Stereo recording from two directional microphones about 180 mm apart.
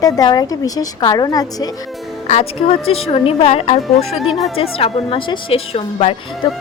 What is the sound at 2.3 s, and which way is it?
A woman's voice, 35° left (ahead or behind).